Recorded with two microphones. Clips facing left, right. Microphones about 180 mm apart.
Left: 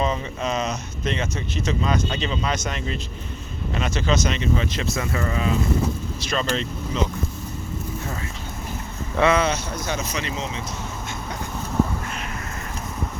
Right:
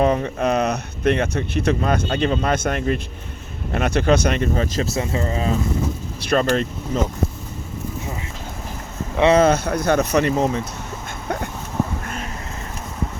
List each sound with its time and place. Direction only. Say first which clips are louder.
0.0 s speech: right 6 dB; 55° right (ahead or behind)
4.9 s speech: right 1 dB; 25° right (ahead or behind)
6.2 s speech: right 7 dB; 50° right (ahead or behind)
9.3 s speech: right 7 dB; 50° right (ahead or behind)